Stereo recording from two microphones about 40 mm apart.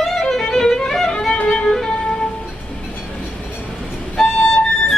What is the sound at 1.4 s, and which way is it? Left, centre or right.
Music, left.